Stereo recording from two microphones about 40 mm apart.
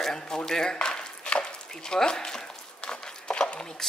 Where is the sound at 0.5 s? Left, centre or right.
Centre.